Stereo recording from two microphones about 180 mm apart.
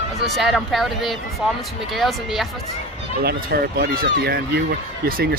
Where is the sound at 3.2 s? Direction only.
60° right (ahead or behind).